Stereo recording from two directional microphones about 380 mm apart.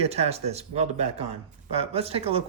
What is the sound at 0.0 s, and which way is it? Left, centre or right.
Speech, centre.